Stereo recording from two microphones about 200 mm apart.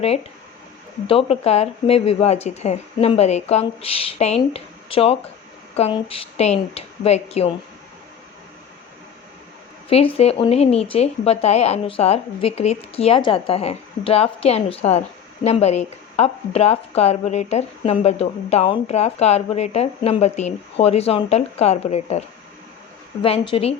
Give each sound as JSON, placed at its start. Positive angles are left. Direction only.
{"t": 1.0, "sound": "speech", "side_deg": 30}
{"t": 9.9, "sound": "speech", "side_deg": 30}
{"t": 23.2, "sound": "speech", "side_deg": 25}